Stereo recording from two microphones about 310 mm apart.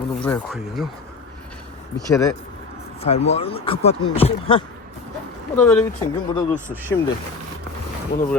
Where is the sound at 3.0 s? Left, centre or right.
Centre.